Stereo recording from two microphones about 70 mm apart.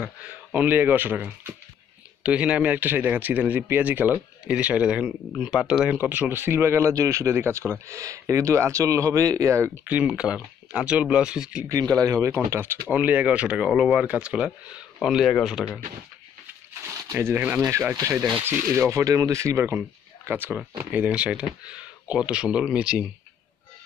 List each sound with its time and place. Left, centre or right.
0.2 s speech: right
5.9 s speech: right
6.4 s speech: right
7.8 s speech: right
9.8 s speech: centre
11.7 s speech: right
12.9 s speech: right
15.0 s speech: centre
15.6 s speech: centre
16.8 s a sound: right
18.0 s speech: right
20.9 s speech: centre